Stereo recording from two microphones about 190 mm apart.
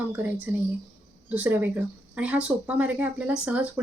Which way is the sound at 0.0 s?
10° right (ahead or behind).